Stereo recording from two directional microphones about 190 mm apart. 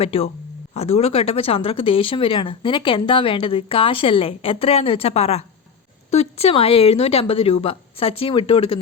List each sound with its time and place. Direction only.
0.0 s speech: 30° left (ahead or behind)